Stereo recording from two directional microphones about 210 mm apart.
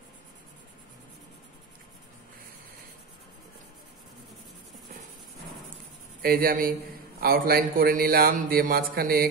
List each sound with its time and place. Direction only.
6.2 s a man's voice: 45° right (ahead or behind)